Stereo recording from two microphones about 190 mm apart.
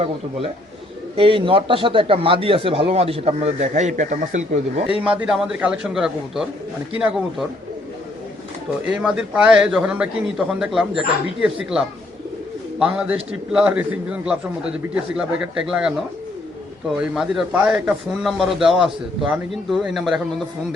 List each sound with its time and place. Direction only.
0.0 s a man's voice: 30° right (ahead or behind)
5.0 s a man's voice: 5° right (ahead or behind)
8.8 s a man's voice: 5° right (ahead or behind)
12.8 s a man's voice: 5° right (ahead or behind)
17.0 s a man's voice: 5° right (ahead or behind)